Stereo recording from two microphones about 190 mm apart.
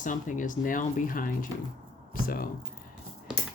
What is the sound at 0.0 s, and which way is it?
Speech, 45° left (ahead or behind).